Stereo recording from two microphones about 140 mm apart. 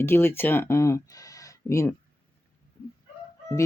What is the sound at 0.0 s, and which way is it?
Speech, 15° left (ahead or behind).